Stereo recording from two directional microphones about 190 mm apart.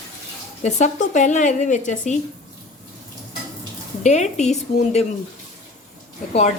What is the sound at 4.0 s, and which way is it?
A woman's voice, 40° left (ahead or behind).